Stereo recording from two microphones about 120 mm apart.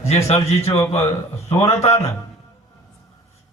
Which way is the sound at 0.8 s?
25° left (ahead or behind).